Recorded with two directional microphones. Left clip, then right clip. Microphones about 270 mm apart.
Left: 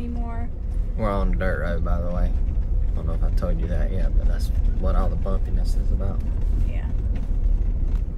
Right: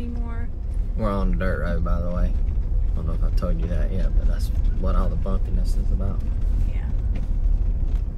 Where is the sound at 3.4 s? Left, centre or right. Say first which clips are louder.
Even; centre.